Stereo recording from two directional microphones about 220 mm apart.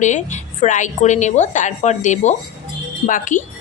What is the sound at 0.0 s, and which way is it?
A woman's voice, 35° left (ahead or behind).